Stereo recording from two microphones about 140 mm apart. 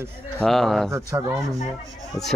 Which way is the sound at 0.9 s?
20° right (ahead or behind).